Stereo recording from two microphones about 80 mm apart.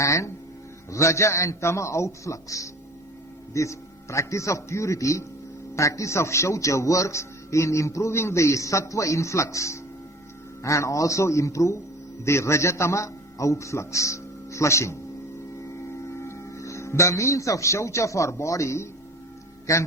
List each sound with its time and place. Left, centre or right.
0.0 s a man's voice: left
16.0 s a man's voice: left